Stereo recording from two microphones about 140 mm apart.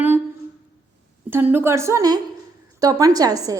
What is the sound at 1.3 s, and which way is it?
A woman's voice, 15° right (ahead or behind).